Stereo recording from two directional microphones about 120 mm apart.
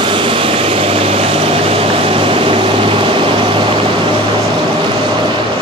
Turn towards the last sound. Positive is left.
turn(degrees=-45)  # may be behind; listen again after turning